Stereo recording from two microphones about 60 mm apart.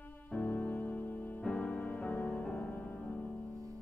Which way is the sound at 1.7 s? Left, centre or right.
Left.